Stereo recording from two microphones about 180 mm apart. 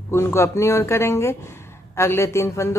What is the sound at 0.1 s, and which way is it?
A woman's voice, 15° left (ahead or behind).